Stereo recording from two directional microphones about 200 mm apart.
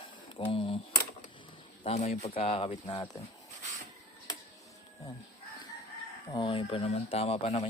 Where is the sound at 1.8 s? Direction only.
30° left (ahead or behind).